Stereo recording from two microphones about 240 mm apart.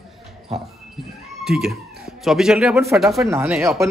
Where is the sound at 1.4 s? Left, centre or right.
Centre.